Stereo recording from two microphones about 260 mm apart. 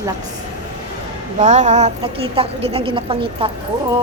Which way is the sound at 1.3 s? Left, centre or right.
Right.